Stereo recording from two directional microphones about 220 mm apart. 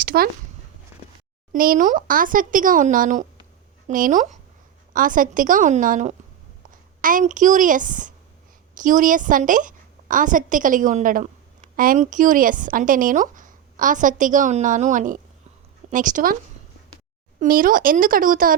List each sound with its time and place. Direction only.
0.0 s speech: 40° right (ahead or behind)
1.5 s a woman's voice: 40° right (ahead or behind)
17.4 s speech: 40° right (ahead or behind)